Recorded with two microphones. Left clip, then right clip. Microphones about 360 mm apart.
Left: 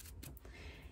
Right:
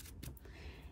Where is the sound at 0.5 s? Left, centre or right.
Centre.